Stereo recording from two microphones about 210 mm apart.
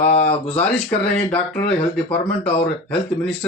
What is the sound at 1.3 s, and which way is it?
Speech, 25° left (ahead or behind).